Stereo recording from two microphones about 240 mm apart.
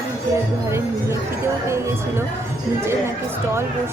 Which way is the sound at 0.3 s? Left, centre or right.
Centre.